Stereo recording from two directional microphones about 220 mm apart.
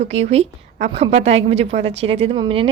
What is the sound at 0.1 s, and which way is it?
A woman's voice, 30° right (ahead or behind).